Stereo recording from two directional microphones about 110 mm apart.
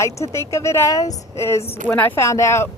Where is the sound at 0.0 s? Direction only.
25° left (ahead or behind).